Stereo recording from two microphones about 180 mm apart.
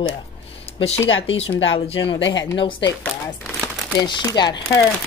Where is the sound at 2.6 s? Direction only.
30° left (ahead or behind).